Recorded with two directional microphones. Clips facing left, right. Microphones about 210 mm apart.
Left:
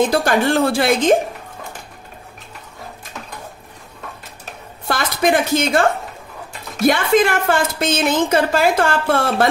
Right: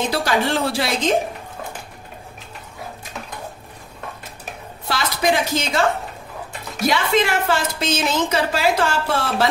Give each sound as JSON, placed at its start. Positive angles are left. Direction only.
{"t": 0.1, "sound": "a woman's voice", "side_deg": 50}
{"t": 4.8, "sound": "a woman's voice", "side_deg": 50}
{"t": 6.9, "sound": "a woman's voice", "side_deg": 50}